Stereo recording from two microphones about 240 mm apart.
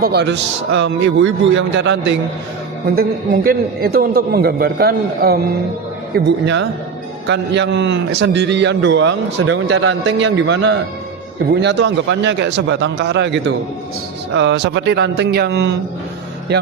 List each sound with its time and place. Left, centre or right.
0.0 s a man's voice: right